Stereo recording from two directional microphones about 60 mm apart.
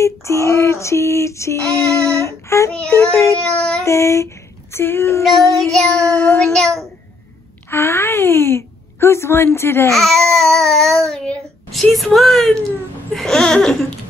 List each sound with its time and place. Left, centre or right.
0.0 s a sound: left
2.1 s child singing: left
3.1 s a sound: left
3.3 s babbling: centre
3.8 s a sound: left
4.7 s a sound: left
5.6 s a woman's voice: centre
5.9 s child singing: left
6.4 s babbling: centre
7.7 s speech: left
9.9 s babbling: centre
11.7 s a woman's voice: centre
13.1 s babbling: centre